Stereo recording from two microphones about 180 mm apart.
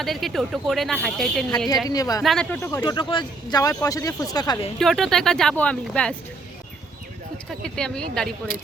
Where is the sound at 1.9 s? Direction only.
20° left (ahead or behind).